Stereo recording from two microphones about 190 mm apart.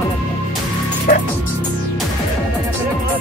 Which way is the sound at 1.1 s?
45° left (ahead or behind).